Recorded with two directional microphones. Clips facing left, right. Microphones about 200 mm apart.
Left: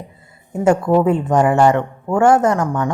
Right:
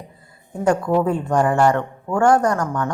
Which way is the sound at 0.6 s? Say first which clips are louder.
Left 4 dB; 25° left (ahead or behind).